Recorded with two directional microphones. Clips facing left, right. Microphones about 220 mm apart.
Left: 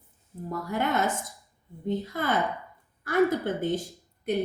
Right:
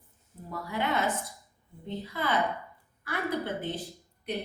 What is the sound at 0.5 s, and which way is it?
A woman's voice, 45° left (ahead or behind).